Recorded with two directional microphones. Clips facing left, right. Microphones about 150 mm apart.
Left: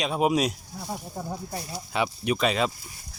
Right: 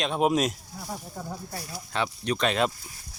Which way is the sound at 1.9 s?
10° left (ahead or behind).